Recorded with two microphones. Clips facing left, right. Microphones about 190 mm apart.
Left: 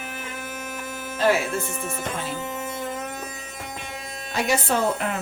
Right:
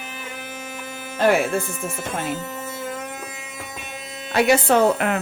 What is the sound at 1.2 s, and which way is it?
Speech, 55° right (ahead or behind).